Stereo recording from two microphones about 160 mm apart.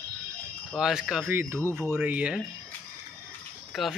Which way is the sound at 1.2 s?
15° right (ahead or behind).